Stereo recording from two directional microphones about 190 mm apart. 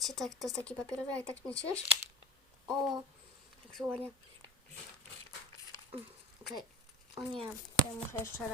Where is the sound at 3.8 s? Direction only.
15° right (ahead or behind).